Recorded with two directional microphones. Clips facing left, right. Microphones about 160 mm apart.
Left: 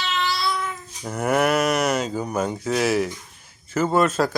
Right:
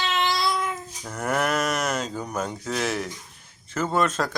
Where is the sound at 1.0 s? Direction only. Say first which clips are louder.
Left 5 dB; 10° left (ahead or behind).